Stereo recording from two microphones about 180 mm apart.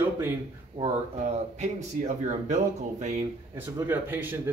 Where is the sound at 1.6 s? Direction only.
40° right (ahead or behind).